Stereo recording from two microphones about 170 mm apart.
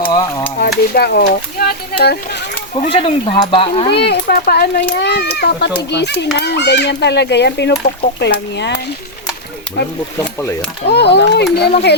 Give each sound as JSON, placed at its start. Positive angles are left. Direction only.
{"t": 0.0, "sound": "speech", "side_deg": 25}
{"t": 0.6, "sound": "speech", "side_deg": 70}
{"t": 2.7, "sound": "speech", "side_deg": 35}
{"t": 3.9, "sound": "speech", "side_deg": 80}
{"t": 10.2, "sound": "speech", "side_deg": 15}
{"t": 10.8, "sound": "speech", "side_deg": 80}